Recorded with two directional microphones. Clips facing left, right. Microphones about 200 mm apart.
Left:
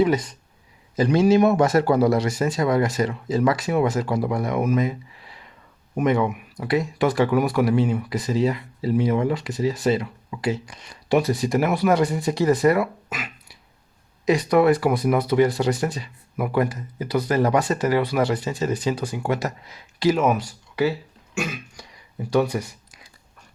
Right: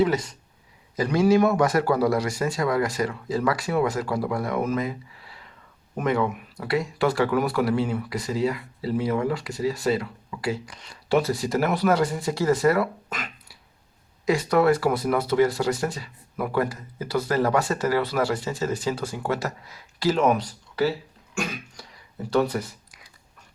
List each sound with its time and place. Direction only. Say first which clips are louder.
0.0 s speech: left 2 dB; 20° left (ahead or behind)
20.1 s speech: even; 5° left (ahead or behind)
22.3 s speech: left 2 dB; 15° left (ahead or behind)